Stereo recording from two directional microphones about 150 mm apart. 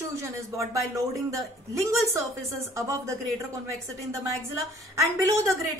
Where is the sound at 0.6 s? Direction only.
20° right (ahead or behind).